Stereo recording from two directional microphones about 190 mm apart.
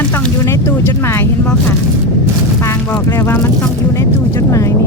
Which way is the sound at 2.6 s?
15° left (ahead or behind).